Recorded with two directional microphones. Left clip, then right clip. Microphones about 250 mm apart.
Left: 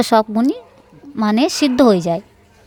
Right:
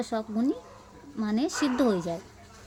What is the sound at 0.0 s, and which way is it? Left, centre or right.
A woman's voice, left.